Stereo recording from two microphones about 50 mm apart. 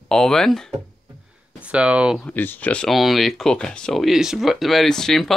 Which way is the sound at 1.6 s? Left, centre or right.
Right.